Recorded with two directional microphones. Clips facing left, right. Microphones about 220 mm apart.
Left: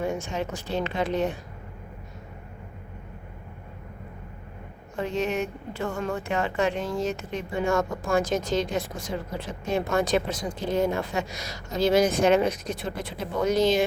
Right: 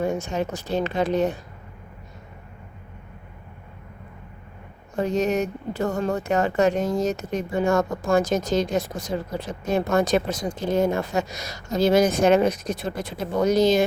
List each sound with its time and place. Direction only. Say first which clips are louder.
0.0 s speech: right 4 dB; 40° right (ahead or behind)
4.9 s speech: right 5 dB; 40° right (ahead or behind)